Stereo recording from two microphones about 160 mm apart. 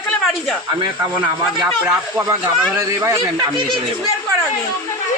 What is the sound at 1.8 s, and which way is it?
Speech, 20° right (ahead or behind).